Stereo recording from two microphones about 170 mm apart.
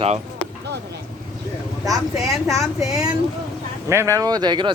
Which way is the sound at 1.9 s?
Centre (ahead or behind).